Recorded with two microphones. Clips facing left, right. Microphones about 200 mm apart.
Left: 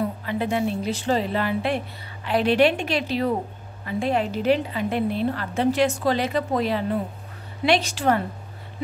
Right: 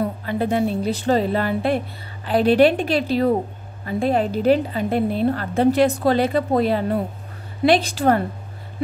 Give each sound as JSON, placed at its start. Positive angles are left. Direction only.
{"t": 0.2, "sound": "a woman's voice", "side_deg": -40}
{"t": 5.5, "sound": "a woman's voice", "side_deg": -55}
{"t": 7.6, "sound": "a woman's voice", "side_deg": -35}